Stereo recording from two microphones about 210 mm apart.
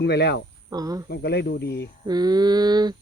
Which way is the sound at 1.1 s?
50° left (ahead or behind).